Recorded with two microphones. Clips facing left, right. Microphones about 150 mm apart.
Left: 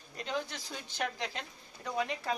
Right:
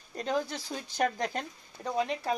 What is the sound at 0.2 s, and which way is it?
Speech, 40° right (ahead or behind).